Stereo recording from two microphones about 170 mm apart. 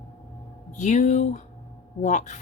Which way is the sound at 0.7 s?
45° left (ahead or behind).